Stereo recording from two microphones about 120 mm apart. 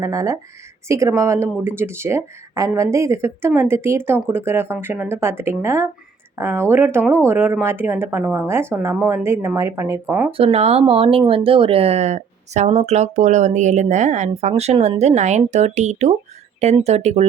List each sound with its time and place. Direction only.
0.0 s speech: 30° right (ahead or behind)
10.3 s speech: 55° right (ahead or behind)